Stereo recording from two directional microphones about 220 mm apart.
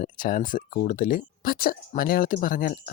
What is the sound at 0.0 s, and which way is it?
Speech, 40° left (ahead or behind).